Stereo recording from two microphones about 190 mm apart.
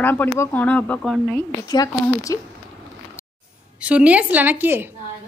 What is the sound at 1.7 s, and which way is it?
Speech, 20° left (ahead or behind).